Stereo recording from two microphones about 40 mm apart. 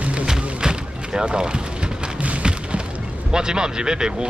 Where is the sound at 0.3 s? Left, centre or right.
Centre.